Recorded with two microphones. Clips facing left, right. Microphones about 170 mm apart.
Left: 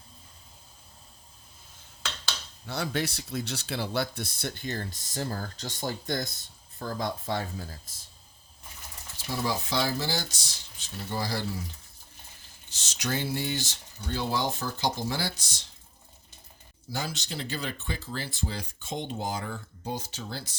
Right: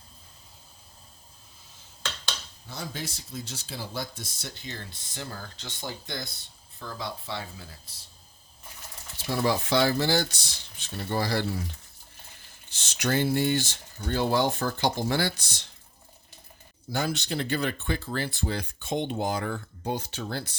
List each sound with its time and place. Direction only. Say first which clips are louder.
2.6 s speech: left 6 dB; 70° left (ahead or behind); by 7.9 s 45° left (ahead or behind)
9.4 s speech: right 5 dB; 65° right (ahead or behind)
12.7 s speech: right 5 dB; 60° right (ahead or behind)
16.9 s speech: right 6 dB; 60° right (ahead or behind)